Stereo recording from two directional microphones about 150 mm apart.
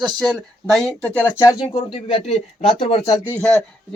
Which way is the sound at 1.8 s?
45° left (ahead or behind).